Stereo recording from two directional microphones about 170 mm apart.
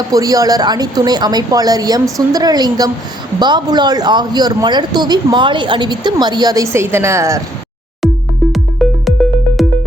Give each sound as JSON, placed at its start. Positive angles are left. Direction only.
{"t": 0.1, "sound": "speech", "side_deg": -20}
{"t": 8.5, "sound": "music", "side_deg": 0}